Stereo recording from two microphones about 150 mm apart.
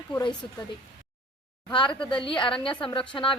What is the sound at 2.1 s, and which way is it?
Speech, 35° left (ahead or behind).